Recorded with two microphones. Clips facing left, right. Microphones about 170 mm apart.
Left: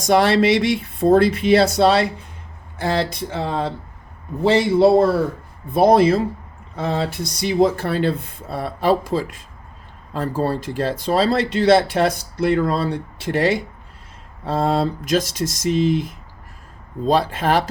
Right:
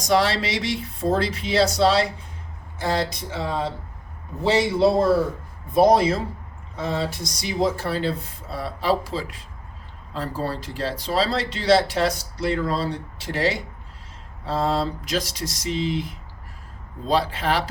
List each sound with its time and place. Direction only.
0.0 s speech: 55° left (ahead or behind)